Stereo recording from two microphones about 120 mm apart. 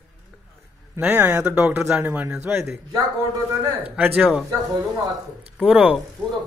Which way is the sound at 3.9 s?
10° right (ahead or behind).